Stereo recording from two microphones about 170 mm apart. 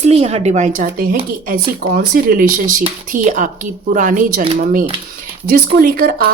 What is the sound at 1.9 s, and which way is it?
A woman's voice, 60° right (ahead or behind).